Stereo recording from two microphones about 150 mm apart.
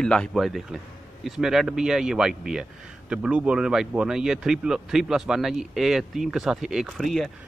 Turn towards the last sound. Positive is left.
turn(degrees=0)  # may be behind; listen again after turning